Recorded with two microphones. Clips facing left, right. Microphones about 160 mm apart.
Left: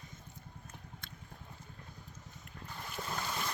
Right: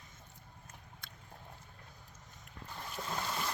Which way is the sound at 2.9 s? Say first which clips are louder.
Right 1 dB; centre (ahead or behind).